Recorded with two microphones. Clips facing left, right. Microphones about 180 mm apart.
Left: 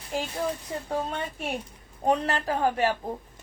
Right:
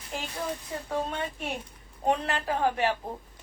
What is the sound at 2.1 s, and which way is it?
Speech, 40° left (ahead or behind).